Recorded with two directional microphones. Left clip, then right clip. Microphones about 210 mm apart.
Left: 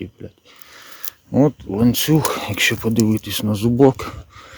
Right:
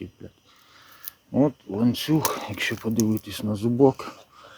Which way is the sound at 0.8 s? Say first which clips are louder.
Left 9 dB; 45° left (ahead or behind).